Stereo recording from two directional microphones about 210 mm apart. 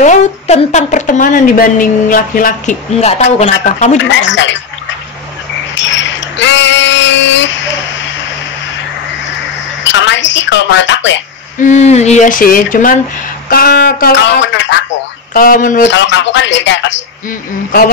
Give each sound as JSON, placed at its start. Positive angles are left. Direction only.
{"t": 0.0, "sound": "speech", "side_deg": 35}
{"t": 4.2, "sound": "speech", "side_deg": 60}
{"t": 5.8, "sound": "a sound", "side_deg": 60}
{"t": 9.8, "sound": "a woman's voice", "side_deg": 60}
{"t": 11.6, "sound": "speech", "side_deg": 35}
{"t": 15.3, "sound": "speech", "side_deg": 40}
{"t": 15.8, "sound": "speech", "side_deg": 60}